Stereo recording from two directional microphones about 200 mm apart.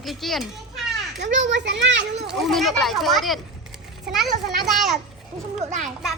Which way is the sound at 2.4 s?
Centre (ahead or behind).